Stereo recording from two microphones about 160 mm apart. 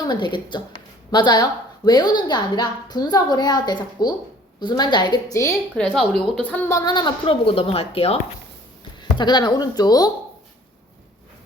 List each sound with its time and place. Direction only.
0.0 s a woman's voice: 30° left (ahead or behind)
5.7 s a woman's voice: 5° left (ahead or behind); by 10.1 s 25° left (ahead or behind)